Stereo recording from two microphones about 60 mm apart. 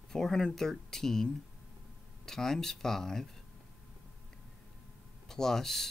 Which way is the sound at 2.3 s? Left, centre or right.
Centre.